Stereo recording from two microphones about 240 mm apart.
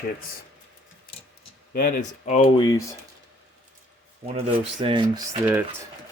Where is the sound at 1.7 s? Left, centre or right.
Left.